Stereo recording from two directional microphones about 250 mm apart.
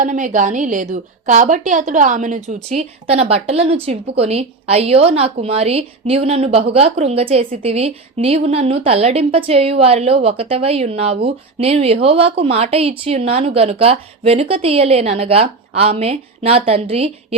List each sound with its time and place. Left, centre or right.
0.0 s a woman's voice: right